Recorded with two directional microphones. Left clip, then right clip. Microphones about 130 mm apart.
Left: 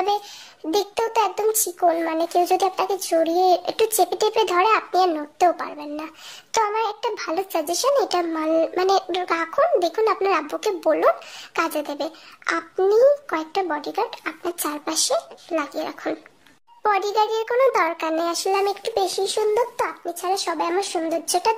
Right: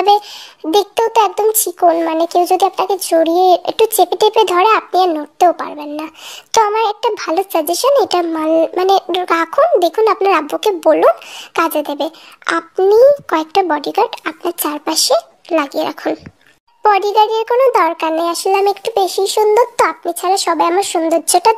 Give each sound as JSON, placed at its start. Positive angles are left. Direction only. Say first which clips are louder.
{"t": 0.0, "sound": "a child's voice", "louder": "right 11 dB", "side_deg": -45}